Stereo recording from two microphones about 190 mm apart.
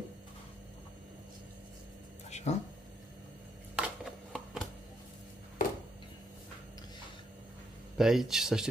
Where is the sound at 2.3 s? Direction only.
35° left (ahead or behind).